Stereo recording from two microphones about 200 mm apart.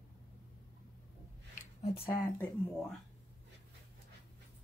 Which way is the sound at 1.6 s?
30° left (ahead or behind).